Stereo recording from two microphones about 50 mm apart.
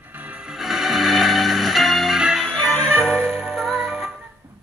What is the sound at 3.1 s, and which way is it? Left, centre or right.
Music, centre.